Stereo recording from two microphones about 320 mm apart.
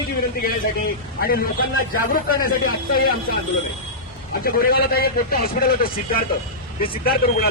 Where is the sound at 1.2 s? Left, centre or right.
Left.